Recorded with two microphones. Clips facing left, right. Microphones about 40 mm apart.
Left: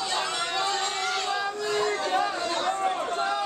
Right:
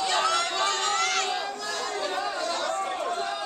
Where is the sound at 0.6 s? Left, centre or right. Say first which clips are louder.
Right 2 dB; right.